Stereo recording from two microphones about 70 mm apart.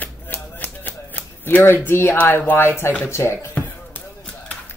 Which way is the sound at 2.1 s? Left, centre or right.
Left.